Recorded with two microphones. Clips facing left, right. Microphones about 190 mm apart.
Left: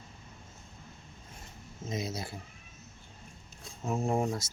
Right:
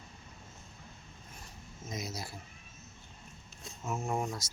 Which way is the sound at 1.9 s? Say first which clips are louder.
Left 5 dB; 25° left (ahead or behind).